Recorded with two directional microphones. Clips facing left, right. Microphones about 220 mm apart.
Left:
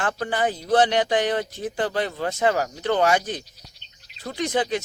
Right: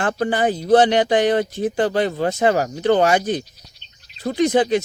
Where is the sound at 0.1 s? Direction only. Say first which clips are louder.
Right 5 dB; 25° right (ahead or behind).